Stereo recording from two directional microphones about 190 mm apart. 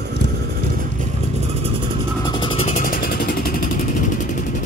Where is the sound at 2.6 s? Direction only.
40° left (ahead or behind).